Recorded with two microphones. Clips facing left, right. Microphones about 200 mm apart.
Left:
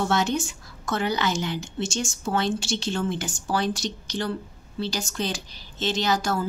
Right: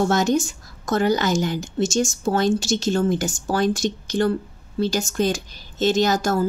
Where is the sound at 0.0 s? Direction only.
40° right (ahead or behind).